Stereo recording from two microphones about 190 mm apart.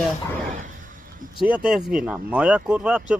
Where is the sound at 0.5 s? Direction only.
45° right (ahead or behind).